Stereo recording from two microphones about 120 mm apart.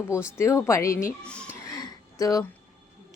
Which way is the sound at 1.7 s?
30° left (ahead or behind).